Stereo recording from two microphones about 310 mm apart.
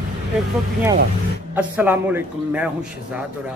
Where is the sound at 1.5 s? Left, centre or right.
Centre.